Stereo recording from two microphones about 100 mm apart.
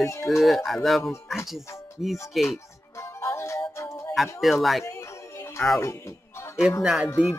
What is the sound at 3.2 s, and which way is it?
Music, 30° left (ahead or behind).